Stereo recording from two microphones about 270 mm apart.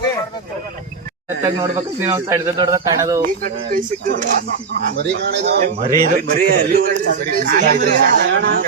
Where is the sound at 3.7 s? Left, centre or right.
Right.